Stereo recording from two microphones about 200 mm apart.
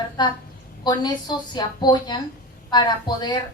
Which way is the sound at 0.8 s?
20° left (ahead or behind).